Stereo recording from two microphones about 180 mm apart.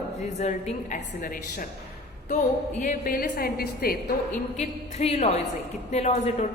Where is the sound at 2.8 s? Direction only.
50° left (ahead or behind).